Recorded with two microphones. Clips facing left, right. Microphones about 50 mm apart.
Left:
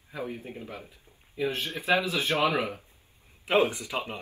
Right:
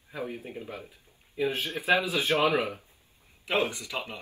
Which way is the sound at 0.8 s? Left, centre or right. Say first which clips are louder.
Right 1 dB; centre.